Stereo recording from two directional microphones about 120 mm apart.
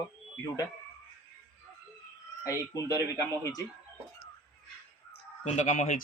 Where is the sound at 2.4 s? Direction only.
25° left (ahead or behind).